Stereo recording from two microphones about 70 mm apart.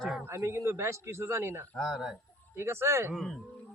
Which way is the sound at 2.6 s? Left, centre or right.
Right.